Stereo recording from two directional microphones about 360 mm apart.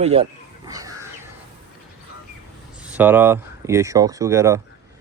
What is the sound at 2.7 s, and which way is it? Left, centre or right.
Speech, centre.